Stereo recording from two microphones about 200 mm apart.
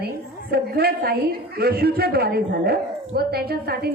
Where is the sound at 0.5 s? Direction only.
50° right (ahead or behind).